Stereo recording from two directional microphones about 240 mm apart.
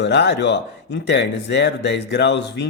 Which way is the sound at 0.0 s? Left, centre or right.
Left.